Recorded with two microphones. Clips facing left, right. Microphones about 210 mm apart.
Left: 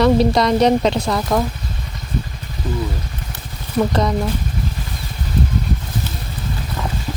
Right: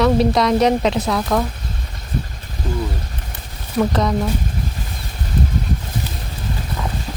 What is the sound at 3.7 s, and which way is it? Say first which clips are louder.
Speech: even; centre (ahead or behind).